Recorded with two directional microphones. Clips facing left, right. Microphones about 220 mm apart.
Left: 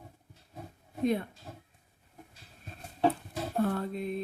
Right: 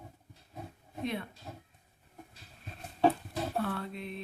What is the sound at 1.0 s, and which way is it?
Speech, 40° left (ahead or behind).